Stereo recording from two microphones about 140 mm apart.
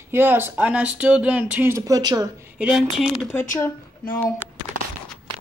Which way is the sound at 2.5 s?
5° right (ahead or behind).